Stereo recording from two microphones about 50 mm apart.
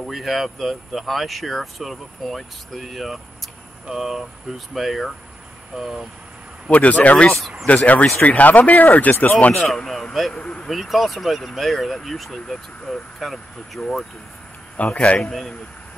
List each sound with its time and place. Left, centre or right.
0.0 s speech: centre
6.7 s speech: left
7.3 s speech: centre
7.6 s speech: left
9.6 s speech: centre
10.7 s speech: centre
14.8 s speech: left
15.1 s a man's voice: centre